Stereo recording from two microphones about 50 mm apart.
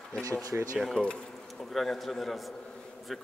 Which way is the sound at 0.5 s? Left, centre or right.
Right.